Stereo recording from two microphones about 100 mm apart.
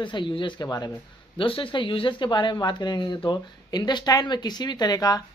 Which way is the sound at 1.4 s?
60° left (ahead or behind).